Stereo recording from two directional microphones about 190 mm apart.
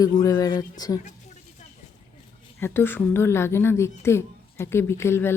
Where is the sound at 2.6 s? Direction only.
10° left (ahead or behind).